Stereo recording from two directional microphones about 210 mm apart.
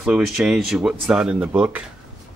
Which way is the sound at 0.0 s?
5° right (ahead or behind).